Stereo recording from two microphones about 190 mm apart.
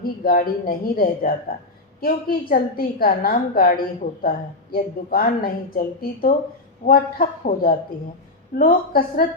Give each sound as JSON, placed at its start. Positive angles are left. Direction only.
{"t": 0.0, "sound": "a woman's voice", "side_deg": 50}